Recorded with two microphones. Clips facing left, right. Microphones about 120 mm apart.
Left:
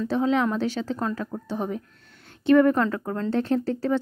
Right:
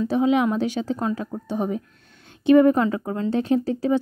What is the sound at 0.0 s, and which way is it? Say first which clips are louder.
Speech: right 3 dB; 15° right (ahead or behind).